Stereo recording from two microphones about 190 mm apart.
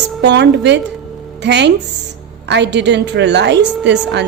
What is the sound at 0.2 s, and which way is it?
A woman's voice, 65° right (ahead or behind).